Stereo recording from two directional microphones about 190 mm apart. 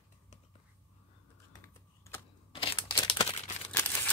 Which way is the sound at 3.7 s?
10° left (ahead or behind).